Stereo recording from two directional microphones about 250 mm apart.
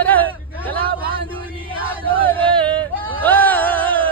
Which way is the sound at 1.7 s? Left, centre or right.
Right.